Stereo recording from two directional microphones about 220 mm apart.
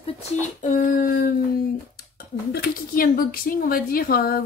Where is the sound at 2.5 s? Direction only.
40° left (ahead or behind).